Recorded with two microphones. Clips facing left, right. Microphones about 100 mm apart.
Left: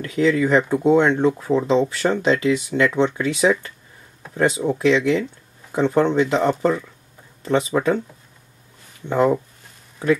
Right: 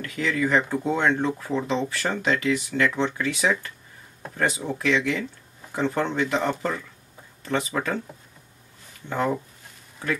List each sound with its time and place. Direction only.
0.0 s speech: 25° left (ahead or behind)
9.1 s speech: 20° left (ahead or behind)